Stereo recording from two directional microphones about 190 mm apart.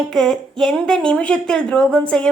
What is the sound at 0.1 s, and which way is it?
Speech, centre (ahead or behind).